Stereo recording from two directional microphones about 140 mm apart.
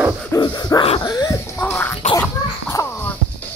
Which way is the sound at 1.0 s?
25° left (ahead or behind).